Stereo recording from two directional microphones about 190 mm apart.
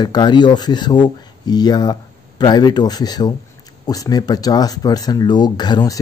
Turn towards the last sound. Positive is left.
turn(degrees=20)  # may be behind; listen again after turning